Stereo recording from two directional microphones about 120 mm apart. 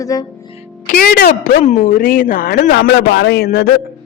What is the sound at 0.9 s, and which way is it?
A woman's voice, 90° left.